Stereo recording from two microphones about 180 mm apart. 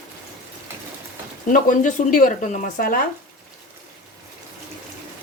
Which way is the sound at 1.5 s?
45° left (ahead or behind).